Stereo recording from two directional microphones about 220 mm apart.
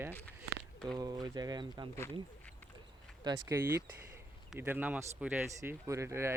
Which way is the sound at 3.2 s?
15° right (ahead or behind).